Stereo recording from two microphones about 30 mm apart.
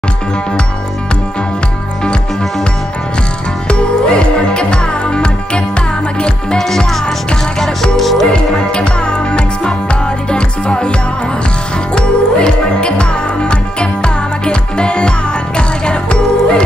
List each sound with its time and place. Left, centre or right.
3.6 s music: left
7.6 s music: centre
8.3 s music: left
11.9 s music: left